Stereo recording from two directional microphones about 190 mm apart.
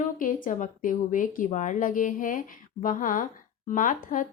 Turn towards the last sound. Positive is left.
turn(degrees=45)  # may be behind; listen again after turning